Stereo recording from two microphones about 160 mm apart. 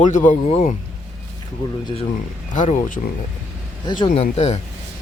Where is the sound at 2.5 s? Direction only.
50° left (ahead or behind).